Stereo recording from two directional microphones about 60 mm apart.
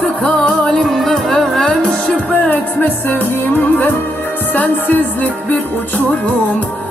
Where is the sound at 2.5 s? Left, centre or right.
Left.